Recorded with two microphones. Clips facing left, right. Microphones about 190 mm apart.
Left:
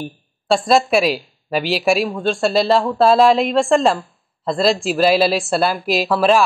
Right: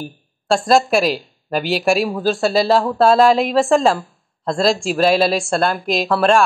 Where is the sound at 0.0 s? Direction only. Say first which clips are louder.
Left 1 dB; centre (ahead or behind).